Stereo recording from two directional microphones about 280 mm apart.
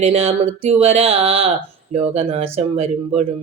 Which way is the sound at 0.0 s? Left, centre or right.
Right.